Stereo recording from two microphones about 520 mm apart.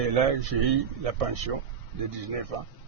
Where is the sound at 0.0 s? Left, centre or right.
Right.